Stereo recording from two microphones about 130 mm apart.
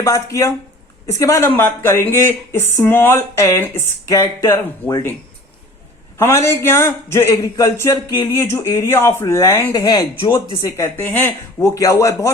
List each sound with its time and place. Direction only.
0.0 s speech: 25° left (ahead or behind)
6.1 s speech: 20° left (ahead or behind)
10.6 s speech: 20° left (ahead or behind)